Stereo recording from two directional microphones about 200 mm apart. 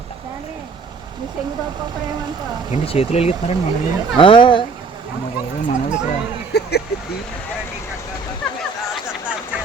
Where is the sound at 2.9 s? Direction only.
30° left (ahead or behind).